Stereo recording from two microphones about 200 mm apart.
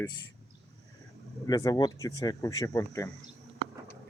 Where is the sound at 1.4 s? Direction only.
20° left (ahead or behind).